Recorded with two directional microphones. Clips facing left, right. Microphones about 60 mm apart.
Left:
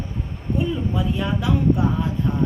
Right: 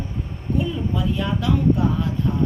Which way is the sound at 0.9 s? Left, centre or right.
Centre.